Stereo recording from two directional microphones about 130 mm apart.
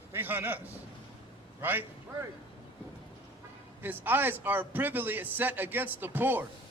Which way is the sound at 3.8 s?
15° right (ahead or behind).